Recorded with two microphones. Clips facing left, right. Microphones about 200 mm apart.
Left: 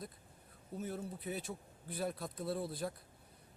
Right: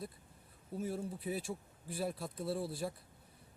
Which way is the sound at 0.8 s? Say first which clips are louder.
Right 3 dB; 5° right (ahead or behind).